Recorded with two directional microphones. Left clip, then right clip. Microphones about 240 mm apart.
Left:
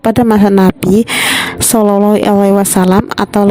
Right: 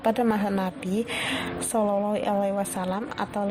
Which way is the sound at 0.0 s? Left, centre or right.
Left.